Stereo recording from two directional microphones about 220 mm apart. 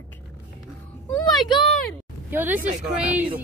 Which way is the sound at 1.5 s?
20° left (ahead or behind).